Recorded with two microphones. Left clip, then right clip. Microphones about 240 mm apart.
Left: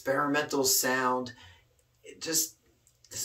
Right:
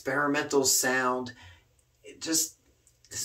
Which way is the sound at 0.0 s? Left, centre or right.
Centre.